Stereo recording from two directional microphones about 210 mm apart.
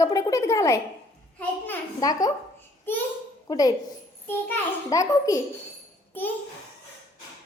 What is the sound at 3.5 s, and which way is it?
A child's voice, 15° left (ahead or behind).